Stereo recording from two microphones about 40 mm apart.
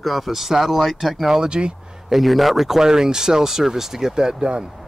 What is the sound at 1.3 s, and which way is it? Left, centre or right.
Speech, centre.